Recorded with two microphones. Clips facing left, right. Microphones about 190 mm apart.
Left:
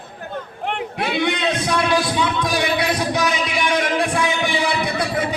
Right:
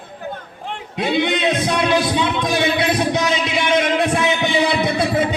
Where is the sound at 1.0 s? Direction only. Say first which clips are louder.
Right 4 dB; 20° right (ahead or behind).